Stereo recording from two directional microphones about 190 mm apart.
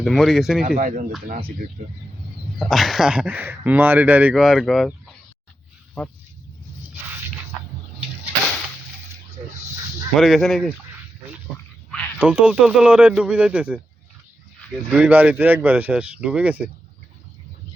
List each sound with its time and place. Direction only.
0.0 s speech: centre (ahead or behind)
0.8 s speech: 45° right (ahead or behind)
2.6 s speech: centre (ahead or behind)
10.2 s speech: centre (ahead or behind)
12.2 s speech: 5° right (ahead or behind)
14.8 s speech: 5° right (ahead or behind)